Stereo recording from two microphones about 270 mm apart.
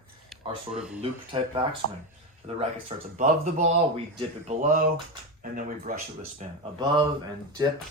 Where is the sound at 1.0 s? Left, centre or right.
Centre.